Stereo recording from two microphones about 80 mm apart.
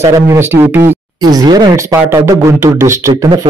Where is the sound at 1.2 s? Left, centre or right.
Right.